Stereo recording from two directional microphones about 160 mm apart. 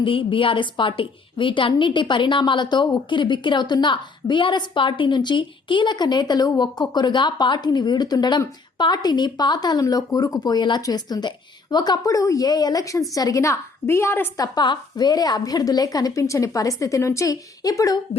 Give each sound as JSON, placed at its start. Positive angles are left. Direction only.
{"t": 0.0, "sound": "a woman's voice", "side_deg": 30}